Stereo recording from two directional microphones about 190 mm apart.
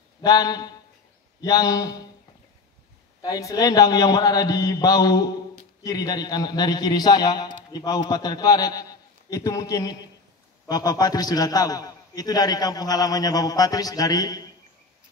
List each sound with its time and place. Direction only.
0.2 s a man's voice: 20° left (ahead or behind)
3.2 s a man's voice: 20° left (ahead or behind)